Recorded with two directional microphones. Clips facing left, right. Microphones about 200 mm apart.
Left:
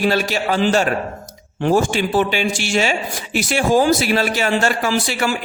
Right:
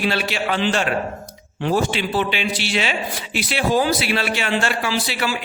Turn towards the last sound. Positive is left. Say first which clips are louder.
# left 4 dB
turn(degrees=45)  # may be behind; listen again after turning